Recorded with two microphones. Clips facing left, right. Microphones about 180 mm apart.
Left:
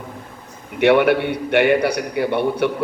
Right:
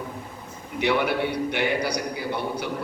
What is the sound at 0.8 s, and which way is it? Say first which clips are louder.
A man's voice: left 9 dB; 60° left (ahead or behind).